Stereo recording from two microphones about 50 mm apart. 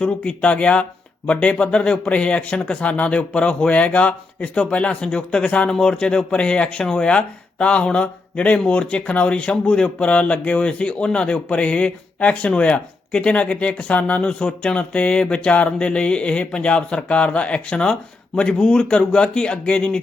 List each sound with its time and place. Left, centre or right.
0.0 s speech: left